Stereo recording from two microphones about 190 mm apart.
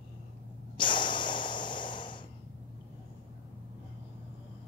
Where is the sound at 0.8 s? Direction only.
25° left (ahead or behind).